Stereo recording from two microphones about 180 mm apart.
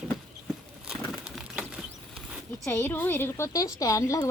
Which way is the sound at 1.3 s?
5° right (ahead or behind).